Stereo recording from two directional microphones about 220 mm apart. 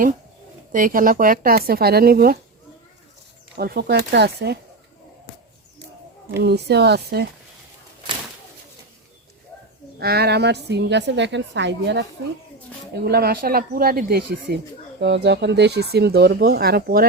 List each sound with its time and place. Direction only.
0.7 s speech: 40° right (ahead or behind)
3.6 s a woman's voice: 45° right (ahead or behind)
6.4 s a woman's voice: 50° right (ahead or behind)
10.0 s a woman's voice: 45° right (ahead or behind)
13.1 s a woman's voice: 45° right (ahead or behind)